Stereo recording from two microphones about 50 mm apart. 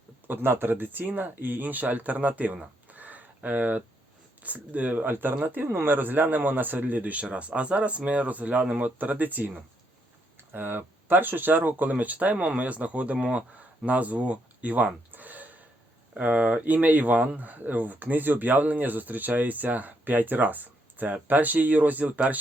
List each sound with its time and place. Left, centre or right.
0.3 s speech: right
2.8 s a sound: right
4.4 s speech: right